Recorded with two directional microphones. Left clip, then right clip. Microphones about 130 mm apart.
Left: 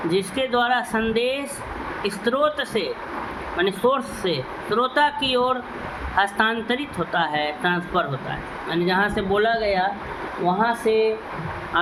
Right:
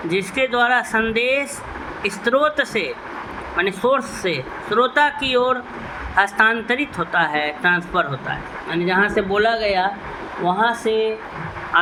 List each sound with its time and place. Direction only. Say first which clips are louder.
0.1 s a man's voice: right 4 dB; 50° right (ahead or behind)